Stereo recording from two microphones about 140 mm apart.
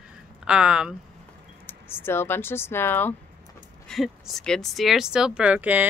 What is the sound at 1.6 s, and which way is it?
Speech, 15° left (ahead or behind).